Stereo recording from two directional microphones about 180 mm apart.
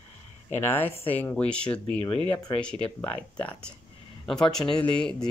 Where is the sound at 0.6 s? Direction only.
10° left (ahead or behind).